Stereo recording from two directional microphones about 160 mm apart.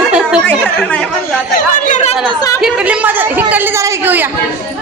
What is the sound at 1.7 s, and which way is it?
Chatter, 55° left (ahead or behind).